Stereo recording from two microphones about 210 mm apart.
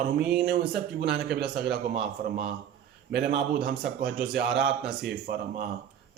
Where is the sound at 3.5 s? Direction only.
50° right (ahead or behind).